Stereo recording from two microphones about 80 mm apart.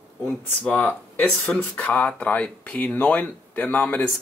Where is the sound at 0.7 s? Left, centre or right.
Centre.